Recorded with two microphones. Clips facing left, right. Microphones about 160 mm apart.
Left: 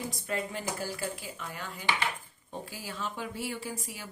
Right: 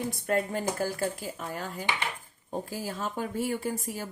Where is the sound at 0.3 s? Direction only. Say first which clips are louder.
Right 7 dB; 50° right (ahead or behind).